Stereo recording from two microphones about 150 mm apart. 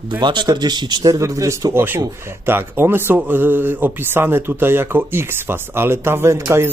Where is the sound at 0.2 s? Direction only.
30° right (ahead or behind).